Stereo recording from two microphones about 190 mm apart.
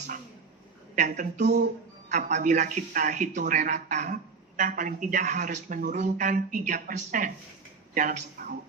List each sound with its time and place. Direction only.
0.9 s a woman's voice: 40° right (ahead or behind)